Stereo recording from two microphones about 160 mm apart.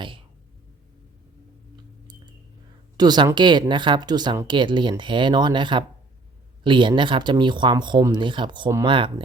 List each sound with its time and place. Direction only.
3.0 s speech: 25° right (ahead or behind)